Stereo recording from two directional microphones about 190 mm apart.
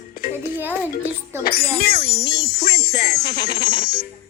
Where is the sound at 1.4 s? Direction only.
55° left (ahead or behind).